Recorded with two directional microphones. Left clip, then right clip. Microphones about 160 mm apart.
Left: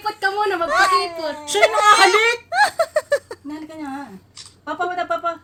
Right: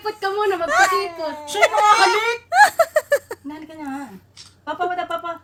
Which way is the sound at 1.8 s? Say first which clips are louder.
Left 2 dB; 50° left (ahead or behind).